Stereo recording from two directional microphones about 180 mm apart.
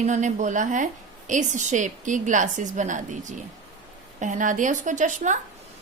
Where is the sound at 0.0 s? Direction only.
40° right (ahead or behind).